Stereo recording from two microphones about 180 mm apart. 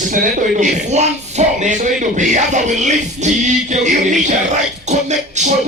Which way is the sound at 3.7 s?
40° right (ahead or behind).